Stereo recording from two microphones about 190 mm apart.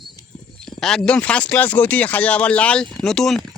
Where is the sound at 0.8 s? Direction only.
Centre (ahead or behind).